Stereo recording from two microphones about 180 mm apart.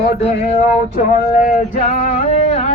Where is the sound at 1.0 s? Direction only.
45° left (ahead or behind).